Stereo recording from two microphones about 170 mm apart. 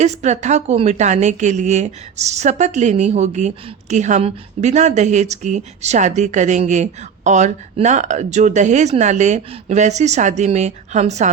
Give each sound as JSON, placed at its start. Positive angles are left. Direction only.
{"t": 0.0, "sound": "a woman's voice", "side_deg": -40}